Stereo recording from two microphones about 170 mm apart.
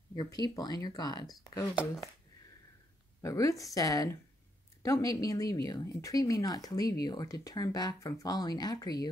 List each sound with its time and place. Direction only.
0.1 s speech: 25° left (ahead or behind)
3.2 s speech: 20° left (ahead or behind)